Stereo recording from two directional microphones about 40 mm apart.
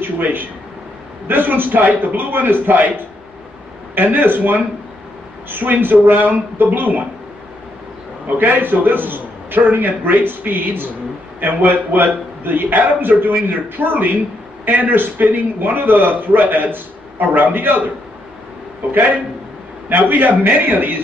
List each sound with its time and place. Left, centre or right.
0.0 s a man's voice: right
3.9 s a man's voice: right
8.4 s a man's voice: right
19.9 s a man's voice: right